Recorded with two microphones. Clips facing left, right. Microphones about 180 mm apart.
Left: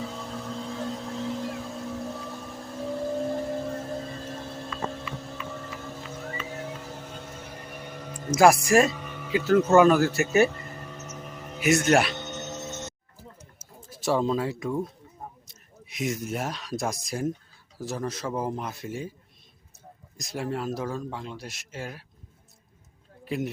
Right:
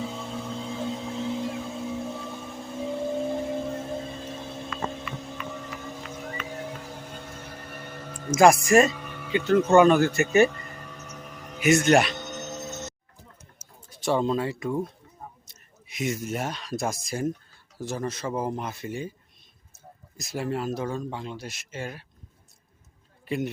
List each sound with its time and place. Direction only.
0.0 s a sound: centre (ahead or behind)
5.5 s vehicle: centre (ahead or behind)
6.6 s music: 10° right (ahead or behind)
7.0 s a sound: 10° right (ahead or behind)
7.3 s a sound: 10° left (ahead or behind)
8.0 s speech: 5° left (ahead or behind)
11.3 s music: centre (ahead or behind)
12.5 s telephone bell ringing: 40° right (ahead or behind)
13.9 s speech: centre (ahead or behind)
20.1 s speech: centre (ahead or behind)
23.2 s speech: centre (ahead or behind)